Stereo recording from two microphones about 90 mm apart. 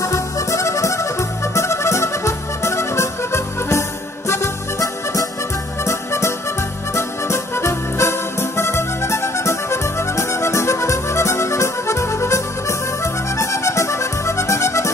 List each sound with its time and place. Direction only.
0.0 s music: 35° left (ahead or behind)